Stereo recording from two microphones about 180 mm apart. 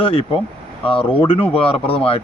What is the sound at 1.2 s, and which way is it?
Speech, 30° left (ahead or behind).